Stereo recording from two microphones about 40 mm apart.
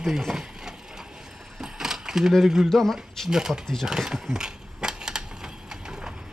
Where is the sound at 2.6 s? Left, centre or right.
Centre.